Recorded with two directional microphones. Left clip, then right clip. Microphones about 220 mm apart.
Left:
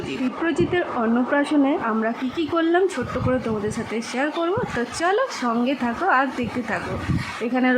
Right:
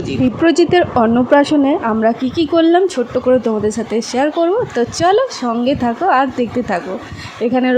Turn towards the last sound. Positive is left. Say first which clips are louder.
# right 6 dB
turn(degrees=-20)  # may be behind; listen again after turning